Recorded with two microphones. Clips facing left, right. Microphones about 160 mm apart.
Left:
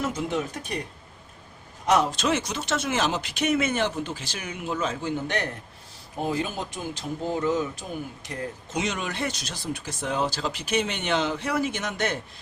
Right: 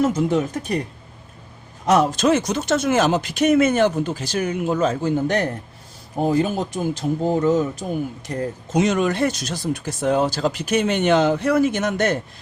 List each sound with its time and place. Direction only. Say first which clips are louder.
0.0 s speech: right 9 dB; 40° right (ahead or behind)
1.9 s speech: right 6 dB; 45° right (ahead or behind)